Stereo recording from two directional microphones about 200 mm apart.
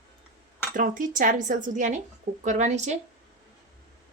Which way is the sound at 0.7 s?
40° right (ahead or behind).